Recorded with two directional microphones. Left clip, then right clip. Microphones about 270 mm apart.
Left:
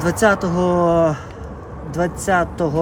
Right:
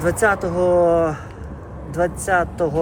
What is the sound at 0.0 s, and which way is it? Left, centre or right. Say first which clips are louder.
Speech: left 1 dB; left.